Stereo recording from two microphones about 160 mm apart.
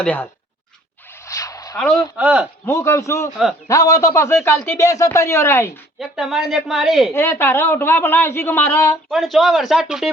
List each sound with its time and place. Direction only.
0.0 s a man's voice: 10° left (ahead or behind)
1.2 s a sound: 20° left (ahead or behind)
2.1 s a man's voice: 5° right (ahead or behind)
2.6 s a man's voice: 20° left (ahead or behind)
6.0 s speech: centre (ahead or behind)
7.1 s a man's voice: 15° left (ahead or behind)
9.0 s speech: centre (ahead or behind)